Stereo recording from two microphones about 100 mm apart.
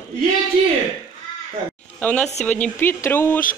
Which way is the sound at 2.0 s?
10° left (ahead or behind).